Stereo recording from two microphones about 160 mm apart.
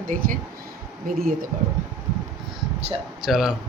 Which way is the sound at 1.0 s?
60° right (ahead or behind).